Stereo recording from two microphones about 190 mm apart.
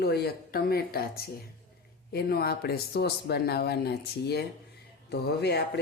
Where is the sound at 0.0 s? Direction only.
55° left (ahead or behind).